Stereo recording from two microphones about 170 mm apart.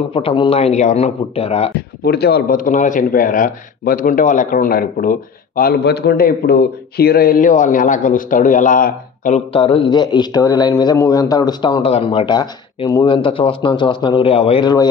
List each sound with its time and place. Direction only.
0.1 s speech: 35° left (ahead or behind)
2.0 s a man's voice: 70° left (ahead or behind)
5.6 s a man's voice: 70° left (ahead or behind); by 9.4 s 50° left (ahead or behind)
9.5 s speech: 35° left (ahead or behind)
11.8 s speech: 35° left (ahead or behind)